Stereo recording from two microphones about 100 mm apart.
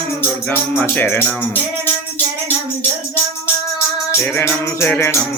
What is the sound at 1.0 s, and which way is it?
Music, 20° left (ahead or behind).